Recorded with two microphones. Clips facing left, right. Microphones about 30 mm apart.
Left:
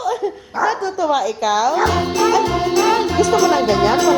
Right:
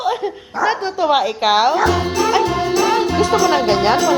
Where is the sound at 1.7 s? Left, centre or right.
Centre.